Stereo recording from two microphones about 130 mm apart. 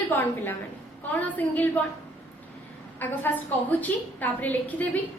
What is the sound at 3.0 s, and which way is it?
A woman's voice, 15° left (ahead or behind).